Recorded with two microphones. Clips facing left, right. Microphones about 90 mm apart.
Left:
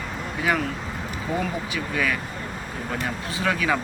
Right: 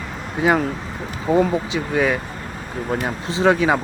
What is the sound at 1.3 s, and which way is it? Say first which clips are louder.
Speech: right 10 dB; 35° right (ahead or behind).